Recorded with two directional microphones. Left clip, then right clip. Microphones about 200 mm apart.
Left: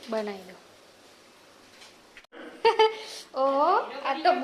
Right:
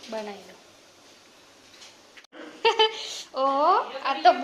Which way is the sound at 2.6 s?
10° left (ahead or behind).